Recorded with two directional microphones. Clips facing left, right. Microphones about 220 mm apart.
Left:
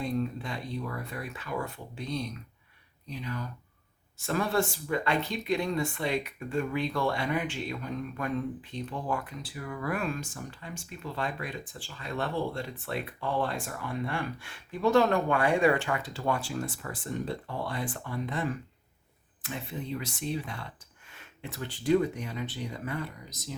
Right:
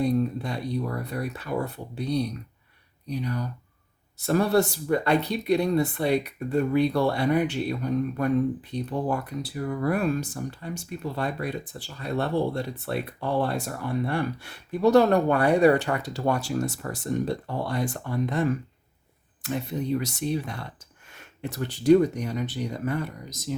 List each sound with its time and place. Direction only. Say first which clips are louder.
0.0 s speech: right 7 dB; 40° right (ahead or behind)